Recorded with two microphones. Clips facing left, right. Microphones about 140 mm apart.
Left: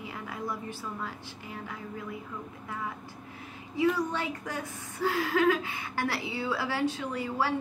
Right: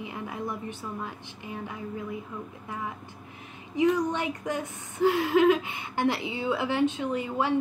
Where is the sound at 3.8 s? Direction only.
20° right (ahead or behind).